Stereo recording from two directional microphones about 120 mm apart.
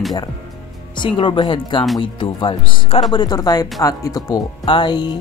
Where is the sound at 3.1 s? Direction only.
35° left (ahead or behind).